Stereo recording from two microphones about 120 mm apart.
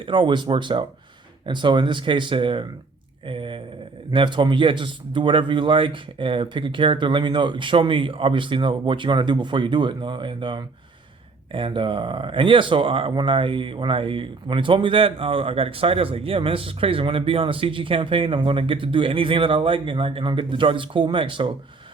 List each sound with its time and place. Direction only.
0.0 s speech: 45° right (ahead or behind)